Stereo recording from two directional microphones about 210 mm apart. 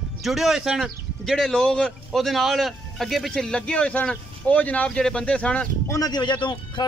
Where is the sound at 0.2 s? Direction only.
Centre (ahead or behind).